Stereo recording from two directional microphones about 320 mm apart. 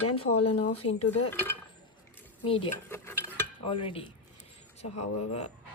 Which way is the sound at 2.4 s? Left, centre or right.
Centre.